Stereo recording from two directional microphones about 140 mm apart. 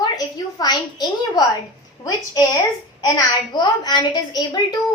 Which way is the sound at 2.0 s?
30° left (ahead or behind).